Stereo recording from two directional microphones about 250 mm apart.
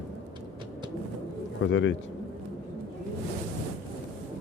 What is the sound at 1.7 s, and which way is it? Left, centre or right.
Speech, left.